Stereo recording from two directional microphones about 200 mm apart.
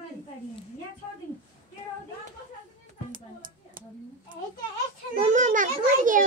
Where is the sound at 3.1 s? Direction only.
45° right (ahead or behind).